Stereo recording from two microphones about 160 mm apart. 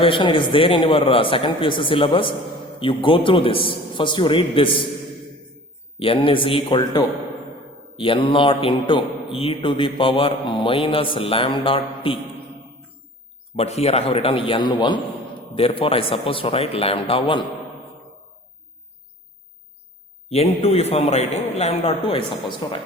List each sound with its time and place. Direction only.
0.0 s mantra: 30° left (ahead or behind)
6.0 s mantra: 35° left (ahead or behind)
13.6 s mantra: 40° left (ahead or behind)
20.3 s mantra: 40° left (ahead or behind)